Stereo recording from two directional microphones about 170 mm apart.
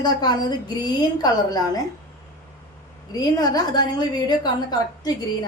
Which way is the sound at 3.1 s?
25° left (ahead or behind).